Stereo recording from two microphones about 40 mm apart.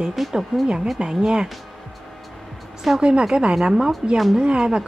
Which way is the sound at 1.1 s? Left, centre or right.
Centre.